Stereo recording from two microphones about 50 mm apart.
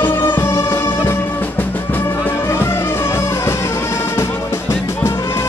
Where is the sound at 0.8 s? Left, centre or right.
Left.